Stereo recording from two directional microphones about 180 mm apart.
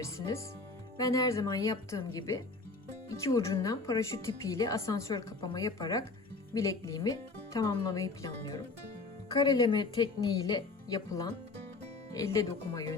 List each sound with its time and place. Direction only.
0.0 s a woman's voice: 15° left (ahead or behind)